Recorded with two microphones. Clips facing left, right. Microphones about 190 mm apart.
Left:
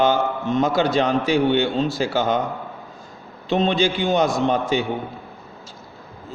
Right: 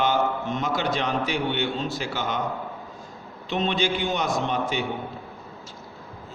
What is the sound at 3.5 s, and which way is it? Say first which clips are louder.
A man's voice: left 6 dB; 35° left (ahead or behind).